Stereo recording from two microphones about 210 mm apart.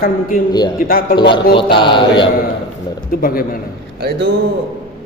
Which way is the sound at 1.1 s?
25° left (ahead or behind).